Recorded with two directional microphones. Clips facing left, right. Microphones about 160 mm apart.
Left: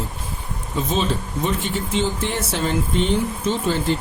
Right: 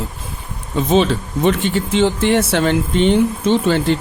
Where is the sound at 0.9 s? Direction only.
75° right (ahead or behind).